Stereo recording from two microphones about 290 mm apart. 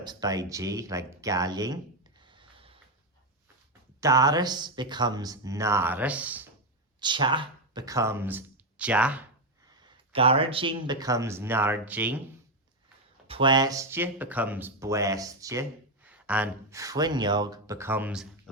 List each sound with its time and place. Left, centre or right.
0.0 s speech: centre
2.2 s a sound: centre
4.0 s speech: centre
7.0 s speech: centre
9.6 s speech: centre
13.2 s speech: centre